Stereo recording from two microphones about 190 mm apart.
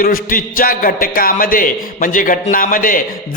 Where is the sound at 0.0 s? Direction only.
50° left (ahead or behind).